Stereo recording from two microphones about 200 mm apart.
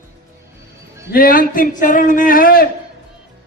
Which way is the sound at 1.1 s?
45° left (ahead or behind).